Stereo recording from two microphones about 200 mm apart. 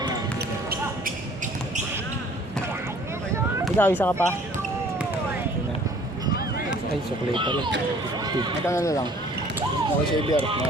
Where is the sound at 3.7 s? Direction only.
10° left (ahead or behind).